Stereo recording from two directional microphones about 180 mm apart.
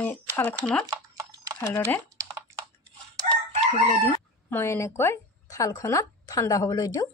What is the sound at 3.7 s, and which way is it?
Crowing, 35° left (ahead or behind).